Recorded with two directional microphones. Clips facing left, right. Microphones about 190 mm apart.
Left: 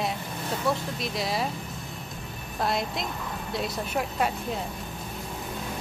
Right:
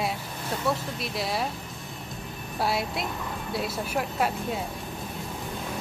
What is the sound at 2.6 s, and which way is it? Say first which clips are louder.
Speech: even; 5° right (ahead or behind).